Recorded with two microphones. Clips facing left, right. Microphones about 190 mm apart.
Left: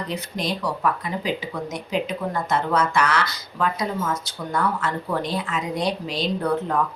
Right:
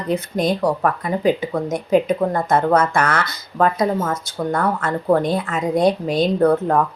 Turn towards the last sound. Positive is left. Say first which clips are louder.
# right 7 dB
turn(degrees=-50)  # may be behind; listen again after turning